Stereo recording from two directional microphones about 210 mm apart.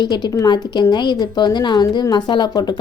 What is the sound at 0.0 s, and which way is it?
A woman's voice, 20° left (ahead or behind).